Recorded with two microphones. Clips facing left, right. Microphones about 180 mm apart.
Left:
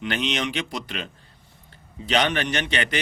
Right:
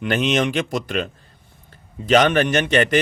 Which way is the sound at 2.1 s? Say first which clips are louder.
Right 7 dB; 50° right (ahead or behind).